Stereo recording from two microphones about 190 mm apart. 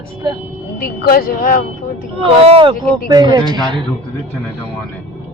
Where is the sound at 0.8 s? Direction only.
50° left (ahead or behind).